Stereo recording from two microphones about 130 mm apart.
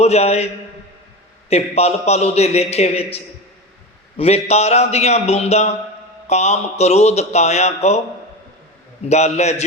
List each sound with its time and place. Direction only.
0.0 s a man's voice: 55° left (ahead or behind)
4.2 s a man's voice: 55° left (ahead or behind)
9.0 s a man's voice: 60° left (ahead or behind)